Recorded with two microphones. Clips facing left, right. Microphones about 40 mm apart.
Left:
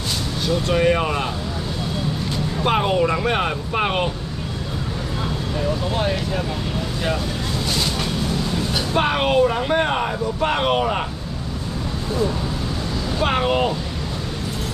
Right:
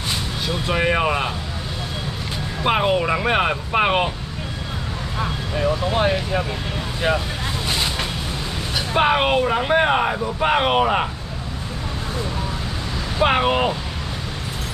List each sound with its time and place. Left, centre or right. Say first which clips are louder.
0.5 s speech: left 3 dB; centre
2.6 s speech: even; centre
5.9 s speech: right 2 dB; right
7.7 s vehicle: even; right
8.7 s speech: right 3 dB; centre
13.2 s speech: right 2 dB; centre